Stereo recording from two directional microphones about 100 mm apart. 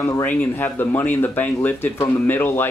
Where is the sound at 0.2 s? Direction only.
20° left (ahead or behind).